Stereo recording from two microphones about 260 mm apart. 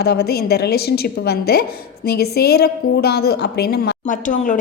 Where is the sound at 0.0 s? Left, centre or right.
Left.